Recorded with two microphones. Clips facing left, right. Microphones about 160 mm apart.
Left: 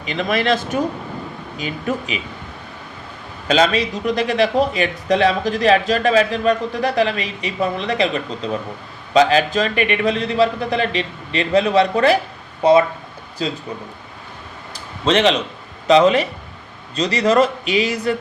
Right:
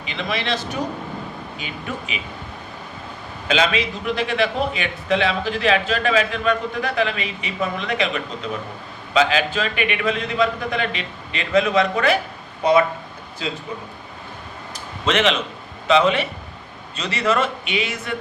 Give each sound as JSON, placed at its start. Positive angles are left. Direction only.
{"t": 0.0, "sound": "speech", "side_deg": 40}
{"t": 3.5, "sound": "speech", "side_deg": 40}
{"t": 13.4, "sound": "speech", "side_deg": 35}
{"t": 15.0, "sound": "speech", "side_deg": 35}